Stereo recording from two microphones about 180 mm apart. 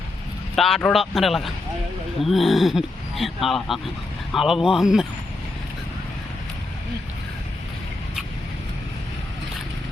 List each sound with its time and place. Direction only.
0.5 s speech: centre (ahead or behind)